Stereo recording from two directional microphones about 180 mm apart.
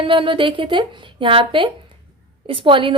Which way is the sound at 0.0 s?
30° right (ahead or behind).